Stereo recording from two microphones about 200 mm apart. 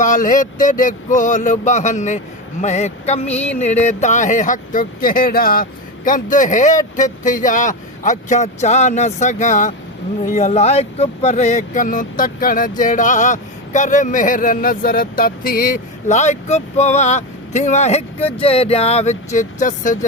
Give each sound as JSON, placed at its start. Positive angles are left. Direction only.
{"t": 0.0, "sound": "speech", "side_deg": 40}